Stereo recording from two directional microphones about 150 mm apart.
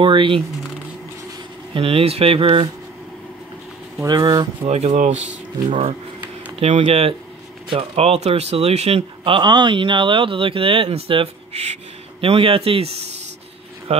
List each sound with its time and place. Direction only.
0.0 s speech: 35° right (ahead or behind)
1.7 s speech: 40° right (ahead or behind)
4.0 s speech: 25° right (ahead or behind)
4.6 s speech: 45° right (ahead or behind)